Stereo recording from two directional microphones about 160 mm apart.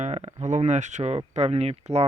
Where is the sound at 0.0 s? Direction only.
45° right (ahead or behind).